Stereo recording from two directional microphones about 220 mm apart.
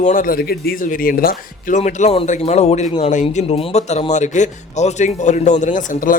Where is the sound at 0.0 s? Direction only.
40° left (ahead or behind).